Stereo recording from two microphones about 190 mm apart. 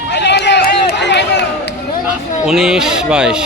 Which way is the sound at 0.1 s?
65° left (ahead or behind).